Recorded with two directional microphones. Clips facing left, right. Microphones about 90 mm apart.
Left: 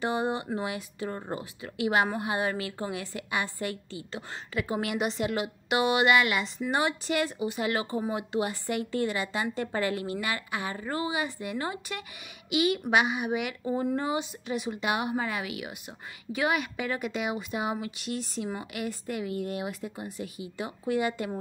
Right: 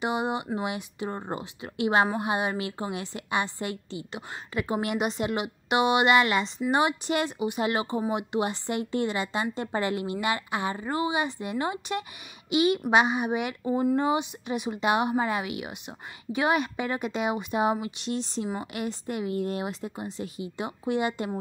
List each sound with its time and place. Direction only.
0.0 s a woman's voice: 15° right (ahead or behind)